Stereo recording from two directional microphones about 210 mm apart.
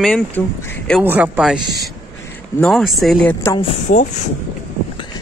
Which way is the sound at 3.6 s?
35° left (ahead or behind).